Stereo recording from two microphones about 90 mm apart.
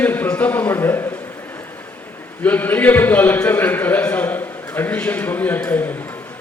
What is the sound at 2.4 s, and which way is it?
A man's voice, 20° left (ahead or behind).